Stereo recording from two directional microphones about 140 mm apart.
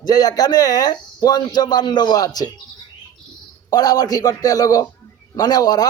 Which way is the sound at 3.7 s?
30° left (ahead or behind).